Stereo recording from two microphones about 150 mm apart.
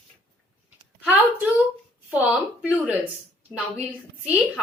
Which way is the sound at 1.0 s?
10° right (ahead or behind).